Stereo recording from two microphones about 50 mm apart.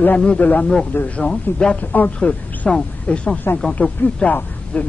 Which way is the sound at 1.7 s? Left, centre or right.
Left.